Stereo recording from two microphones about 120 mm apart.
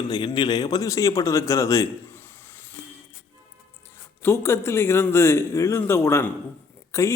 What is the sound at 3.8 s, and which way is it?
Speech, 20° left (ahead or behind).